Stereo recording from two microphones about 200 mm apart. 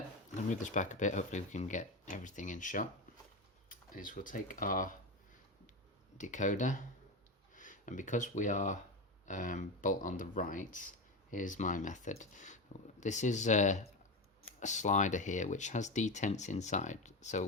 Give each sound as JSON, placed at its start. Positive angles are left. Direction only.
{"t": 0.5, "sound": "speech", "side_deg": 35}
{"t": 6.1, "sound": "speech", "side_deg": 40}